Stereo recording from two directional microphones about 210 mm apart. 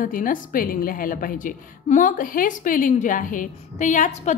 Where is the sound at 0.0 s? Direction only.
40° left (ahead or behind).